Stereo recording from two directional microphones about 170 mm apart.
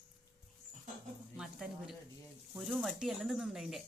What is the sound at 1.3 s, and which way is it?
Speech, 5° right (ahead or behind).